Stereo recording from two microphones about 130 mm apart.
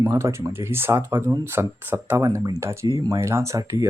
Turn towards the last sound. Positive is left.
turn(degrees=-25)  # may be behind; listen again after turning